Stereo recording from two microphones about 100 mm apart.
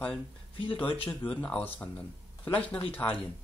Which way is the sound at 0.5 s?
55° left (ahead or behind).